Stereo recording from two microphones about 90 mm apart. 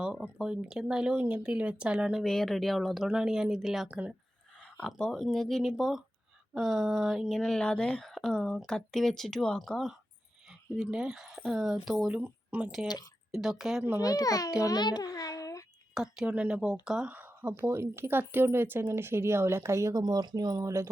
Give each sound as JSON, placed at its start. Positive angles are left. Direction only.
{"t": 0.0, "sound": "speech", "side_deg": -5}
{"t": 2.2, "sound": "speech", "side_deg": 5}
{"t": 4.9, "sound": "speech", "side_deg": 5}
{"t": 10.8, "sound": "speech", "side_deg": -5}
{"t": 12.2, "sound": "speech", "side_deg": -20}
{"t": 13.3, "sound": "speech", "side_deg": -5}
{"t": 14.0, "sound": "a child's voice", "side_deg": 40}
{"t": 14.6, "sound": "a sound", "side_deg": 45}
{"t": 16.0, "sound": "speech", "side_deg": -5}
{"t": 17.1, "sound": "a sound", "side_deg": -20}
{"t": 17.6, "sound": "speech", "side_deg": -30}